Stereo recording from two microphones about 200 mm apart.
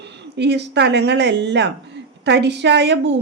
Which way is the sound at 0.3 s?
60° right (ahead or behind).